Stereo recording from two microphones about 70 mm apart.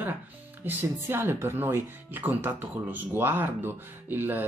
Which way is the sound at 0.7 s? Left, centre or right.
Right.